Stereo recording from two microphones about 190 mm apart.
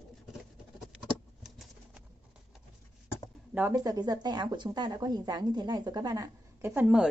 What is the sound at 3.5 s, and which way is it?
Speech, 15° right (ahead or behind).